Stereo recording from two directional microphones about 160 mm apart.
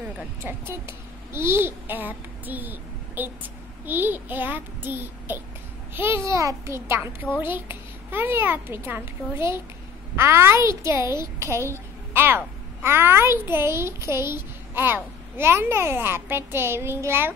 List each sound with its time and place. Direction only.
0.4 s a child's voice: 15° right (ahead or behind)